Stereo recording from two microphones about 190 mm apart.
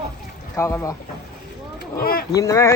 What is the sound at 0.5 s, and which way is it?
Speech, 15° left (ahead or behind).